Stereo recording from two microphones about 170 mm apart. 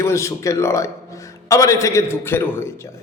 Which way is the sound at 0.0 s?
15° left (ahead or behind).